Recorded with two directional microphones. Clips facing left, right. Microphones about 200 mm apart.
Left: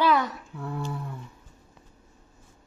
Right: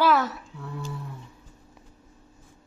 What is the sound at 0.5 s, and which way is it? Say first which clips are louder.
Speech: left 4 dB; 55° left (ahead or behind).